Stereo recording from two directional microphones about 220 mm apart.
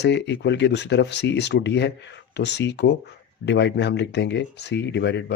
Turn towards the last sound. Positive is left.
turn(degrees=50)  # may be behind; listen again after turning